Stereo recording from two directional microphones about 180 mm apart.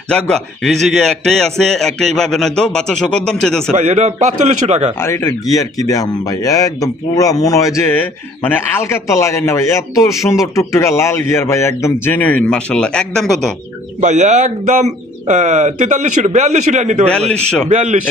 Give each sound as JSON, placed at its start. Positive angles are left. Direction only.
{"t": 0.1, "sound": "a man's voice", "side_deg": 5}
{"t": 3.7, "sound": "speech", "side_deg": -40}
{"t": 4.9, "sound": "a man's voice", "side_deg": 15}
{"t": 14.0, "sound": "speech", "side_deg": -40}
{"t": 17.3, "sound": "a man's voice", "side_deg": 5}
{"t": 17.7, "sound": "speech", "side_deg": -40}